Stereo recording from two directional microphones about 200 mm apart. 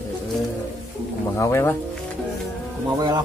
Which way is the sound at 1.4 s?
15° left (ahead or behind).